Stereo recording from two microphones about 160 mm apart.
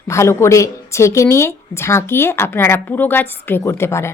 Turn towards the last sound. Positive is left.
turn(degrees=15)  # may be behind; listen again after turning